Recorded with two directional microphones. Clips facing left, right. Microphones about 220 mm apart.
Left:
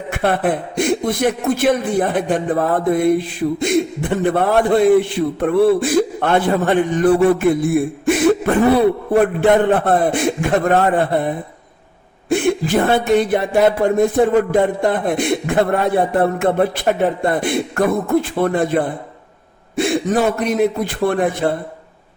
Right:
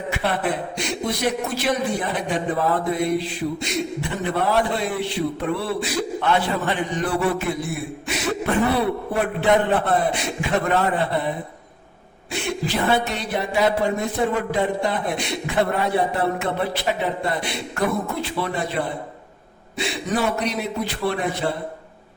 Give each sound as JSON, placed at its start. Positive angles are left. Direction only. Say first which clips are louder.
{"t": 0.1, "sound": "a man's voice", "louder": "left 7 dB", "side_deg": 55}
{"t": 12.3, "sound": "a man's voice", "louder": "left 10 dB", "side_deg": 50}